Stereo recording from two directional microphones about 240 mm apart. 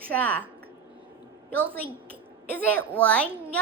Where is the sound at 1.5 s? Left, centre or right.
Centre.